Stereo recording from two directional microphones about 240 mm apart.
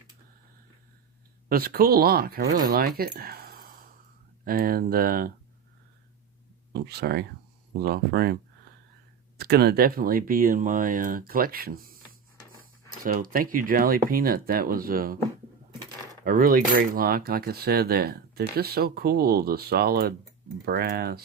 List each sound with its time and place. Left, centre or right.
1.5 s speech: right
4.4 s cutlery: right
6.7 s cutlery: right
9.4 s cutlery: right
13.1 s cutlery: right
16.2 s cutlery: right